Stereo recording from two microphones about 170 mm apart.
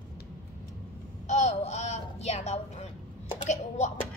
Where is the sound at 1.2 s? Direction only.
45° left (ahead or behind).